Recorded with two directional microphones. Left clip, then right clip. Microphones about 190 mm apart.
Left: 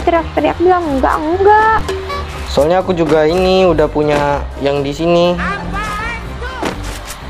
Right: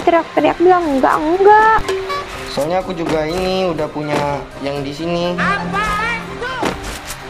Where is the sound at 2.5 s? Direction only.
40° left (ahead or behind).